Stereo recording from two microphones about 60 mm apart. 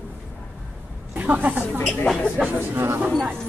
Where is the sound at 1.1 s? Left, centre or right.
Right.